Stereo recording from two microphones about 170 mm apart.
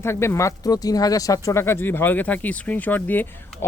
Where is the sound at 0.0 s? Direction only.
15° left (ahead or behind).